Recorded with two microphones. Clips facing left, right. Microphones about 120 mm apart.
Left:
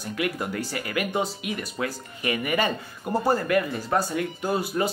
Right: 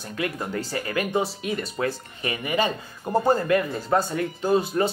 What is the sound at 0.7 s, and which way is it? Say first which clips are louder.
Speech: right 2 dB; 30° right (ahead or behind).